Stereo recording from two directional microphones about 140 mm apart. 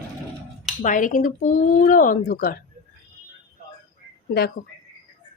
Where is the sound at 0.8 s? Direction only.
65° left (ahead or behind); by 2.6 s 90° left.